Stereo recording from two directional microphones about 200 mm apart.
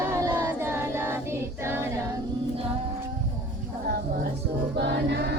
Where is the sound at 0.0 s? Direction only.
10° right (ahead or behind).